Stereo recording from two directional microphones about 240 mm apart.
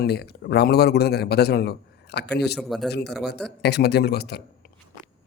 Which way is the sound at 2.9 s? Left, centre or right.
Left.